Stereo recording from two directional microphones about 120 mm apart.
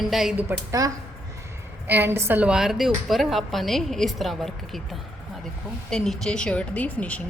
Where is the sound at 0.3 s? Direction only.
25° right (ahead or behind).